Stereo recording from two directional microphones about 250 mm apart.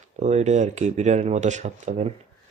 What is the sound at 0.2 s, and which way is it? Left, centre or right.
Speech, right.